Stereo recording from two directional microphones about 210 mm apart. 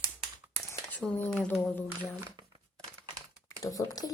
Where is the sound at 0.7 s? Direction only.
5° left (ahead or behind).